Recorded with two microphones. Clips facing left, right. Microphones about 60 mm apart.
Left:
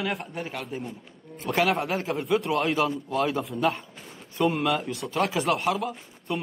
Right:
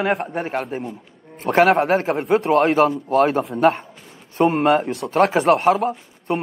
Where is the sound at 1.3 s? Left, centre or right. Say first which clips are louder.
Right 9 dB; right.